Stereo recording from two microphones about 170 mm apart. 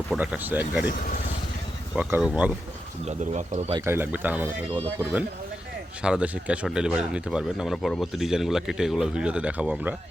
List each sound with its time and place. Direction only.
0.2 s speech: 10° right (ahead or behind)
2.0 s speech: 10° right (ahead or behind)
3.1 s speech: 40° right (ahead or behind)
3.7 s speech: 15° right (ahead or behind)
6.0 s speech: 5° right (ahead or behind)